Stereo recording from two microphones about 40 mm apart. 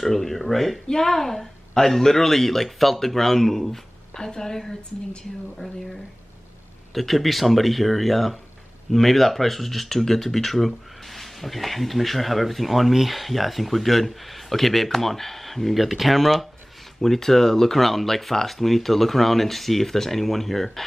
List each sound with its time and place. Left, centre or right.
0.0 s speech: centre
0.8 s a woman's voice: centre
6.9 s speech: centre